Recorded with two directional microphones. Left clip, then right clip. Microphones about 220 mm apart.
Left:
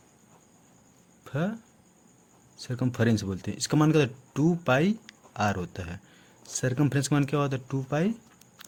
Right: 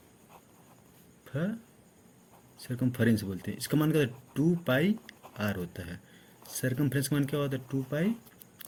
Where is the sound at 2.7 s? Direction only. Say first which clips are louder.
Left 2 dB; 45° left (ahead or behind).